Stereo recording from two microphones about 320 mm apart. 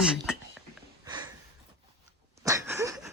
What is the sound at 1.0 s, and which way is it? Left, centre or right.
Sniff, centre.